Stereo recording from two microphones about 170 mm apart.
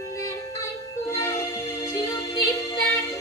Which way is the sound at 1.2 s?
20° left (ahead or behind).